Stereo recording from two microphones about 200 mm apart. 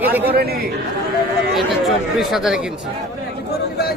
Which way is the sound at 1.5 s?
Centre (ahead or behind).